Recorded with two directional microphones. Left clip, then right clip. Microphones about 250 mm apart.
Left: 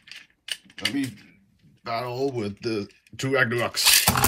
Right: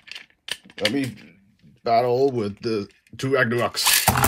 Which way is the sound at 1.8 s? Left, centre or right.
Centre.